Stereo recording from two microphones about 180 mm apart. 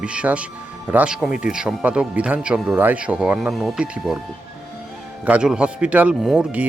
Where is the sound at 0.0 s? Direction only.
5° right (ahead or behind).